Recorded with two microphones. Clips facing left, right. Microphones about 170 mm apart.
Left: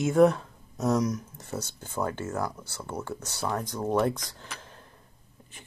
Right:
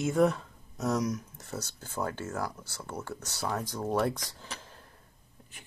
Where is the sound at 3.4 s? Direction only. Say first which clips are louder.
Left 2 dB; 5° right (ahead or behind).